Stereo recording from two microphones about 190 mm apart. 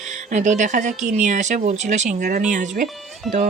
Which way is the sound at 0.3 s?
40° right (ahead or behind).